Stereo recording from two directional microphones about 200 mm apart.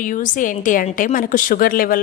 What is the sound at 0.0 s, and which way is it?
A woman's voice, 40° left (ahead or behind).